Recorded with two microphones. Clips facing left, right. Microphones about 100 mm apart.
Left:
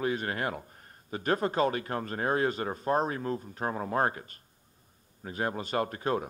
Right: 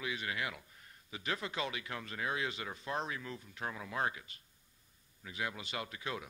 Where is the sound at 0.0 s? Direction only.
45° left (ahead or behind).